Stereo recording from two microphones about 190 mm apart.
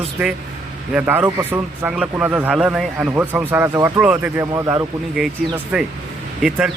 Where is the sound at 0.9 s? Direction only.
10° right (ahead or behind).